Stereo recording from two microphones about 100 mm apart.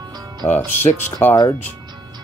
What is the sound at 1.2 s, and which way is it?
Speech, 20° left (ahead or behind).